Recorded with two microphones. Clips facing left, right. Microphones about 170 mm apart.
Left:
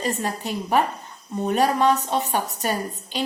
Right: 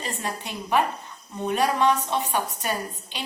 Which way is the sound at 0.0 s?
40° left (ahead or behind).